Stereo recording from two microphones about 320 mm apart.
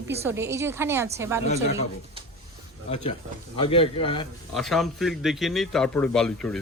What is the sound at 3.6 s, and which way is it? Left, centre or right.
Speech, centre.